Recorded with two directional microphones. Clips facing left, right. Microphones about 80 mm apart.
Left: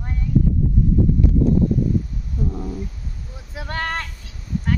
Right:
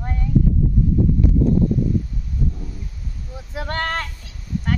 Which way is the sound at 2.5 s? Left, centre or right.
Left.